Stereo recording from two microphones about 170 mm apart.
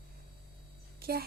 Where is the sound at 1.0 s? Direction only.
65° right (ahead or behind).